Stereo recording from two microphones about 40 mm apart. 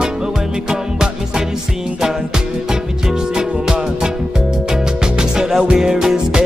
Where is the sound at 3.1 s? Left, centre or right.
Centre.